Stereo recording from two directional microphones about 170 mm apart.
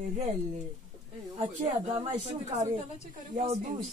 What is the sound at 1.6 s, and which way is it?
Speech, 40° right (ahead or behind).